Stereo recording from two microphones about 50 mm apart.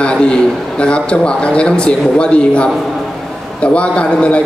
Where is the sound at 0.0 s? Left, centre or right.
Centre.